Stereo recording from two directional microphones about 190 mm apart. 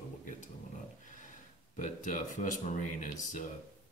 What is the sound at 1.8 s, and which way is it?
Speech, 40° left (ahead or behind).